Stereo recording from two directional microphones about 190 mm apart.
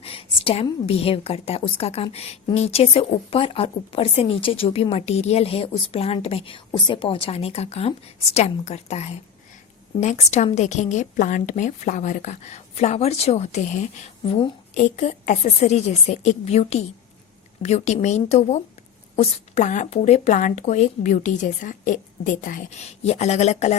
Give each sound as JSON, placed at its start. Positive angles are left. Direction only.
{"t": 0.0, "sound": "a woman's voice", "side_deg": 30}